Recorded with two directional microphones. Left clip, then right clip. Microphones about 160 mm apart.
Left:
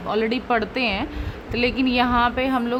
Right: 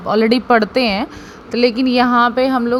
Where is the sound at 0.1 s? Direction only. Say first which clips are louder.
Right 9 dB; 45° right (ahead or behind).